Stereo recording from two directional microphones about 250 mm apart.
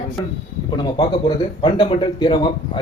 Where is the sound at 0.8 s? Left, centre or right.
Centre.